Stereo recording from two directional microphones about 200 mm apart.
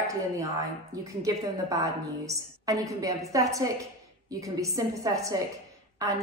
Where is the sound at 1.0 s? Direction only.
15° right (ahead or behind).